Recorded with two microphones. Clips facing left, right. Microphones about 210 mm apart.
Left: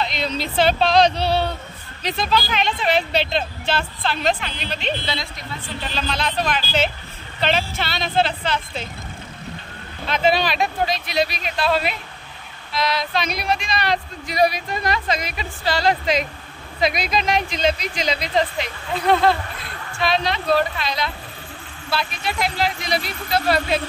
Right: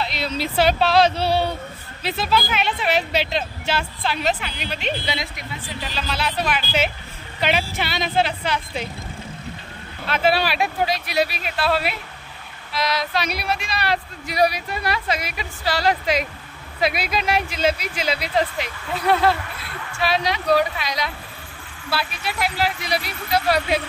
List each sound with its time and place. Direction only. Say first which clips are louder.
0.0 s speech: left 1 dB; 10° right (ahead or behind)
10.0 s speech: left 1 dB; 10° right (ahead or behind)